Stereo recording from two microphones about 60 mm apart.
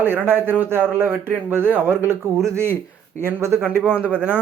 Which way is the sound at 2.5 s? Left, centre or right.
Right.